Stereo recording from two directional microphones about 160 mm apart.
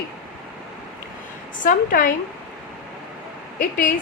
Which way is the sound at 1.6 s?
60° left (ahead or behind).